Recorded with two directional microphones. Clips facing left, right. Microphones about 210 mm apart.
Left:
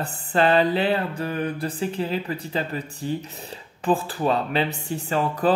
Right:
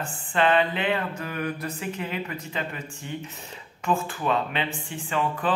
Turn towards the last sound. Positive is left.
turn(degrees=40)  # may be behind; listen again after turning